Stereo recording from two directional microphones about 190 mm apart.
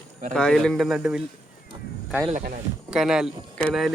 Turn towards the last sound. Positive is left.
turn(degrees=0)  # may be behind; listen again after turning